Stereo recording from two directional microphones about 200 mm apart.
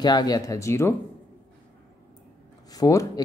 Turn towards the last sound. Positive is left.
turn(degrees=15)  # may be behind; listen again after turning